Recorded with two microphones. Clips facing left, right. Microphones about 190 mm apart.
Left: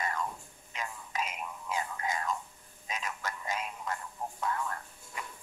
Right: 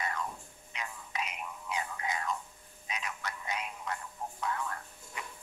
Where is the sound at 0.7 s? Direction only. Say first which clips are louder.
Left 2 dB; 45° left (ahead or behind).